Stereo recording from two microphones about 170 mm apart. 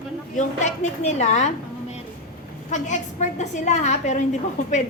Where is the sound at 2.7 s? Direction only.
45° left (ahead or behind).